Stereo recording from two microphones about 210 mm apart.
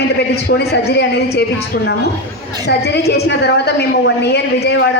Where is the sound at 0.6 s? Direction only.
50° left (ahead or behind).